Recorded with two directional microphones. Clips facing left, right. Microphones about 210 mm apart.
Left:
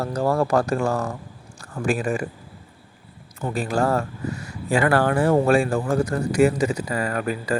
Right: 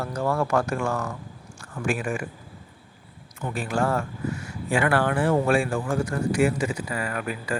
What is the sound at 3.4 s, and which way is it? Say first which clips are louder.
Speech: left 3 dB; 35° left (ahead or behind).